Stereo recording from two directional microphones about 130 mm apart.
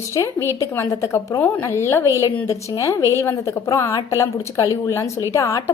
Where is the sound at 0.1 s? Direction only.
30° left (ahead or behind).